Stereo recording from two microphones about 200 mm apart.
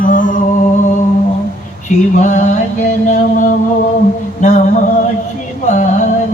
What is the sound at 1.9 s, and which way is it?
A man's voice, 35° left (ahead or behind).